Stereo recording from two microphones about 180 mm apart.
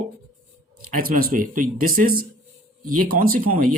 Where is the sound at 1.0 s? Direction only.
55° right (ahead or behind).